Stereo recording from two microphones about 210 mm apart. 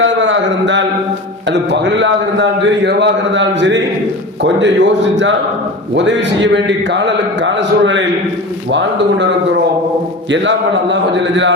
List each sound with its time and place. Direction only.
0.0 s a sound: 65° right (ahead or behind)
1.7 s a man's voice: 60° right (ahead or behind)
10.3 s a man's voice: 60° right (ahead or behind)